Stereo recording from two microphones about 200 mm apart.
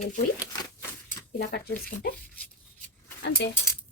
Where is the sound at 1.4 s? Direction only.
55° left (ahead or behind).